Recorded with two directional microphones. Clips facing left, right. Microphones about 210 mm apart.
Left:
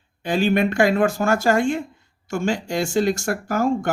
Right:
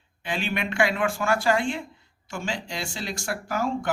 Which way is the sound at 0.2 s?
40° left (ahead or behind).